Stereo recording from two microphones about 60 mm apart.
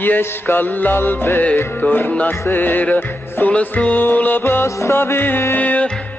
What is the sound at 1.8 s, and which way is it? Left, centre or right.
Music, left.